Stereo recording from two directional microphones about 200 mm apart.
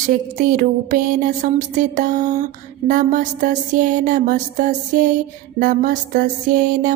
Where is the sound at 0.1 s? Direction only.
45° right (ahead or behind).